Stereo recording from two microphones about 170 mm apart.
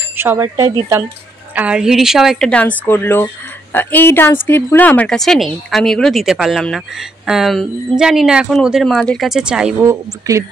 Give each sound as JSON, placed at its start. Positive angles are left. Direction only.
{"t": 0.1, "sound": "speech", "side_deg": -15}
{"t": 1.5, "sound": "speech", "side_deg": -5}
{"t": 9.8, "sound": "speech", "side_deg": -20}